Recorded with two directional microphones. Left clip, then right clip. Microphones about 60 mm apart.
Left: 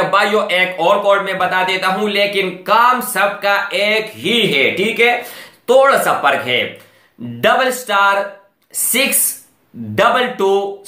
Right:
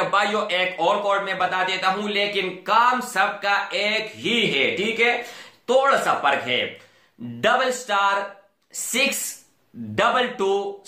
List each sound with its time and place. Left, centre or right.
0.1 s speech: left
9.9 s speech: left